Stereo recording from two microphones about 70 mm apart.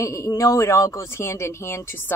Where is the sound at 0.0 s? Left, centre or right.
Left.